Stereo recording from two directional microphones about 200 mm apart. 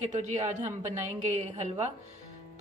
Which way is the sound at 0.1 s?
35° right (ahead or behind).